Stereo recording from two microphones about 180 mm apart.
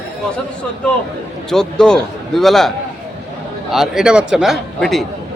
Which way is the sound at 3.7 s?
5° right (ahead or behind).